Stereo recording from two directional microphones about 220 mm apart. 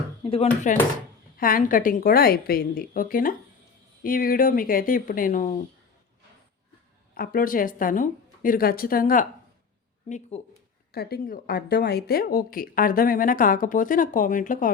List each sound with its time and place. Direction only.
0.2 s a woman's voice: 25° left (ahead or behind)
7.1 s a woman's voice: 40° left (ahead or behind)
10.9 s a woman's voice: 45° left (ahead or behind)